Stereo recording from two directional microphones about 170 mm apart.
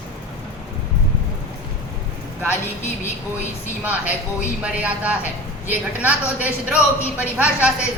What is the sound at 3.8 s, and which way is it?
A woman's voice, 10° right (ahead or behind).